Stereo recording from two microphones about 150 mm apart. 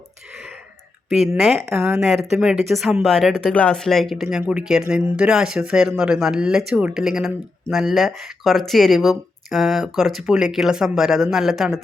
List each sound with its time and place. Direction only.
1.1 s speech: centre (ahead or behind)
1.8 s speech: 15° right (ahead or behind)